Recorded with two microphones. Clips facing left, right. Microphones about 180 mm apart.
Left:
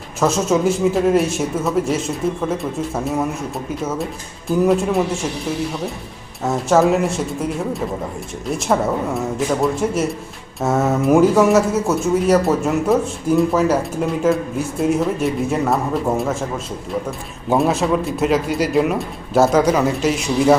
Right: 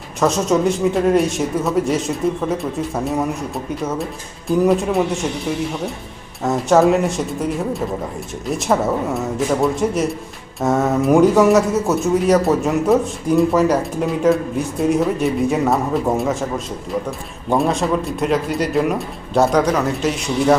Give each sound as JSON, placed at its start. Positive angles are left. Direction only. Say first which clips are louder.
{"t": 0.2, "sound": "a man's voice", "louder": "even", "side_deg": 0}
{"t": 6.4, "sound": "a man's voice", "louder": "right 1 dB", "side_deg": 0}